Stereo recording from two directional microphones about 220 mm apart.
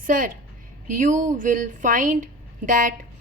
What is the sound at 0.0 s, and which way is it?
A woman's voice, 35° right (ahead or behind).